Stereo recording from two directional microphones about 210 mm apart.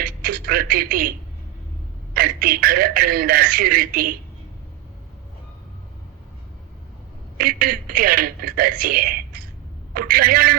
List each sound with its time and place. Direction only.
0.0 s speech: 45° right (ahead or behind)
2.1 s a man's voice: 45° right (ahead or behind)
7.3 s a man's voice: 45° right (ahead or behind)